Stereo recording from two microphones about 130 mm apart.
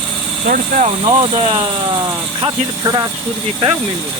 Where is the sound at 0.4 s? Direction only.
90° right.